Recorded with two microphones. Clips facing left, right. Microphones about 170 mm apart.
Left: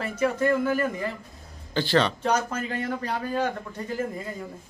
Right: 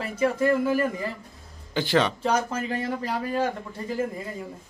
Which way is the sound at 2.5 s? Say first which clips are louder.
Right 2 dB; 30° right (ahead or behind).